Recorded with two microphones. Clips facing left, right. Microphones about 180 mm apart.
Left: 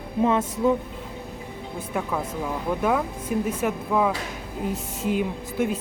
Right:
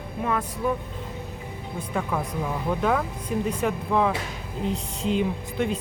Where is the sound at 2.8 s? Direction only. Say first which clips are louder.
Left 2 dB; 5° left (ahead or behind).